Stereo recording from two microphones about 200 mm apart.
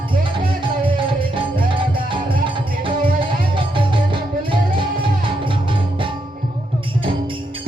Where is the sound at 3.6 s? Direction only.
25° right (ahead or behind).